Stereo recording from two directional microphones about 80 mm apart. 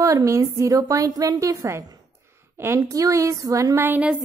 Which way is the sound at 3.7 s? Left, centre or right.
Right.